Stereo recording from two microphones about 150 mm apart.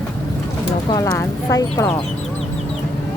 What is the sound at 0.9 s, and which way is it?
Clip-clop, 20° left (ahead or behind).